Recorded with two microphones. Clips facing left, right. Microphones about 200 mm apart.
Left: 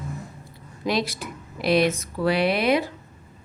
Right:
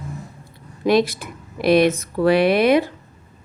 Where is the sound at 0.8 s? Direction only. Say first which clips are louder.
Right 8 dB; 55° right (ahead or behind).